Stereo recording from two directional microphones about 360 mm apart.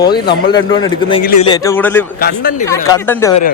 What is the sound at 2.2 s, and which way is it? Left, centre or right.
Speech, left.